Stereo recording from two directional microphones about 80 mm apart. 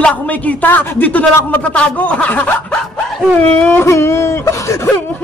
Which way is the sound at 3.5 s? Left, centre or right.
Left.